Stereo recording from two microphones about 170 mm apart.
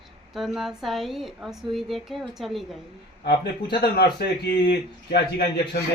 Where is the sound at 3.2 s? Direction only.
75° left (ahead or behind).